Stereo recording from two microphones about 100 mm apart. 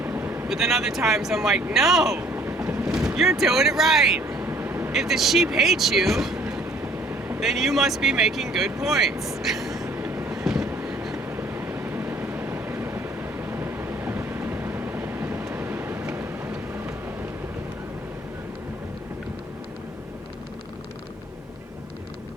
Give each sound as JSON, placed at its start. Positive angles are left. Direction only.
{"t": 0.0, "sound": "vehicle", "side_deg": -20}
{"t": 0.4, "sound": "speech", "side_deg": -5}
{"t": 2.1, "sound": "vehicle", "side_deg": -20}
{"t": 3.2, "sound": "speech", "side_deg": -5}
{"t": 4.3, "sound": "a sound", "side_deg": -20}
{"t": 4.9, "sound": "speech", "side_deg": -5}
{"t": 6.5, "sound": "vehicle", "side_deg": -15}
{"t": 7.3, "sound": "speech", "side_deg": -5}
{"t": 9.4, "sound": "vehicle", "side_deg": -5}
{"t": 9.9, "sound": "train", "side_deg": -20}
{"t": 10.3, "sound": "train", "side_deg": -5}
{"t": 11.3, "sound": "vehicle", "side_deg": -20}